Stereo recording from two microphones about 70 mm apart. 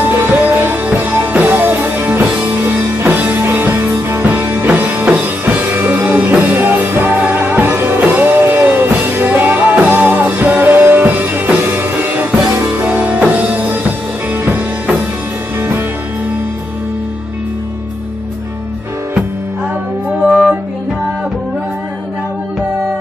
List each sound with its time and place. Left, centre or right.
0.2 s music: right
20.2 s music: centre